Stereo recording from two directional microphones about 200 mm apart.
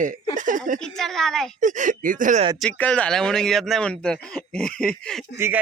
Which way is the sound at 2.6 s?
5° left (ahead or behind).